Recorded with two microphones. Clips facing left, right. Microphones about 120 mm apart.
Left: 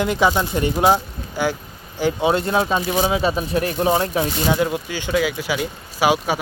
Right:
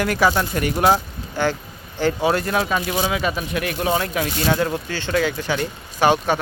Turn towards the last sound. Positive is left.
turn(degrees=5)  # may be behind; listen again after turning